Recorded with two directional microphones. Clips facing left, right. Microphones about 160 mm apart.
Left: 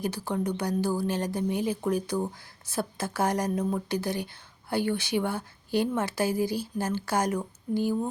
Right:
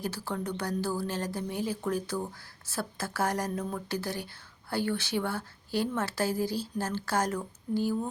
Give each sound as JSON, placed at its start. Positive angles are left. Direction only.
{"t": 0.0, "sound": "speech", "side_deg": 15}